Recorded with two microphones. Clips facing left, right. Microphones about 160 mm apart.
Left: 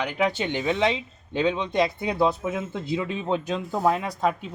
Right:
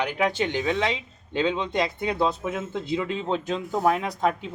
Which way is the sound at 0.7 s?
20° left (ahead or behind).